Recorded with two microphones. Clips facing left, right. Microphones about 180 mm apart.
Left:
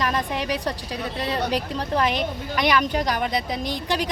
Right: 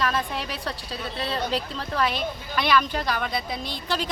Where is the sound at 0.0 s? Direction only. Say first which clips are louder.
Left 2 dB; 15° left (ahead or behind).